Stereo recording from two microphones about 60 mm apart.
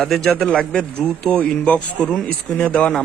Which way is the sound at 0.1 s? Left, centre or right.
Centre.